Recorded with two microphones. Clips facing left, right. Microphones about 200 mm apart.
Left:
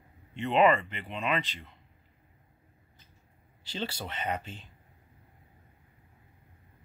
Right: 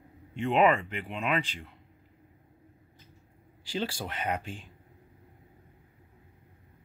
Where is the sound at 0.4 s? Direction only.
10° right (ahead or behind).